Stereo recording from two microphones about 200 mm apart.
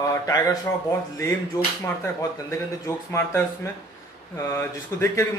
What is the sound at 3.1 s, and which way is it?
Speech, 10° left (ahead or behind).